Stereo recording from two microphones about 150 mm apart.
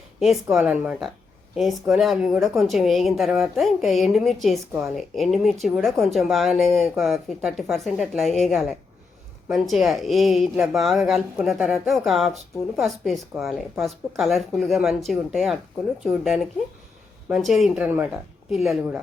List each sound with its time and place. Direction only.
0.4 s a woman's voice: 15° right (ahead or behind)